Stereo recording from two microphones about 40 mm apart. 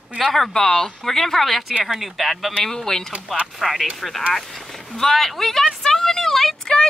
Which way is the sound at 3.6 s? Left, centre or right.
Centre.